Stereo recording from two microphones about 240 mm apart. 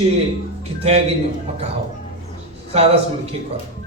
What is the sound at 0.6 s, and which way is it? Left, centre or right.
Speech, right.